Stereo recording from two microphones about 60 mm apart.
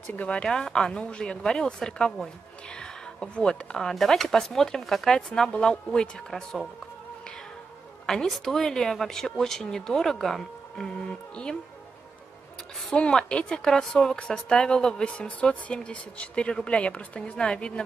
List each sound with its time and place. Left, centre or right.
0.0 s speech: left
0.4 s a woman's voice: centre
8.1 s a woman's voice: centre
12.9 s a woman's voice: centre